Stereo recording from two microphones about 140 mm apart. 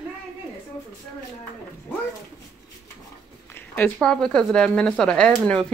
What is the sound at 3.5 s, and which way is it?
Speech, 15° left (ahead or behind).